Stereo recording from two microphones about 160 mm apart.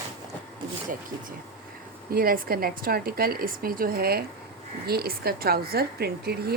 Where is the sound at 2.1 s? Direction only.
65° right (ahead or behind).